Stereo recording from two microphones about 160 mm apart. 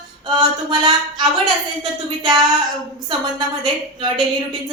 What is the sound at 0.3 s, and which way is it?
A woman's voice, 30° right (ahead or behind).